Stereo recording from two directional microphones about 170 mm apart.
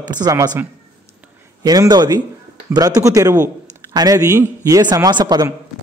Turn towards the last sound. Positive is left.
turn(degrees=-20)  # may be behind; listen again after turning